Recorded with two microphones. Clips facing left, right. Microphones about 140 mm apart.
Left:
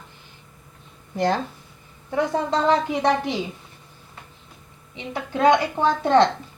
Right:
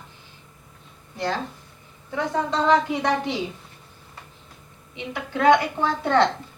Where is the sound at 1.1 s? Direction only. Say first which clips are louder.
Left 5 dB; 55° left (ahead or behind).